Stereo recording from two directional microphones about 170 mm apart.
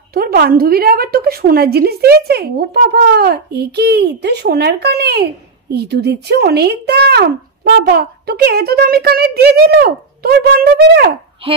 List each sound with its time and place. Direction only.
0.1 s a woman's voice: 65° right (ahead or behind)
11.4 s a child's voice: 30° right (ahead or behind)